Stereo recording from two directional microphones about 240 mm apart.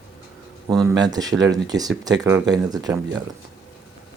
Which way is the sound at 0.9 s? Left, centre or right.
Centre.